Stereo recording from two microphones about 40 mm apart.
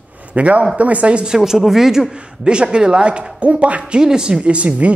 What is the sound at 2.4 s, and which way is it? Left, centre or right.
Speech, right.